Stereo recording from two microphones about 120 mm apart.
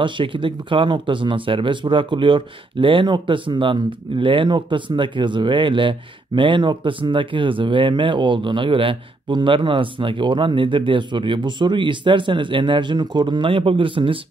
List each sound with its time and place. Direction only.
0.0 s speech: 45° right (ahead or behind)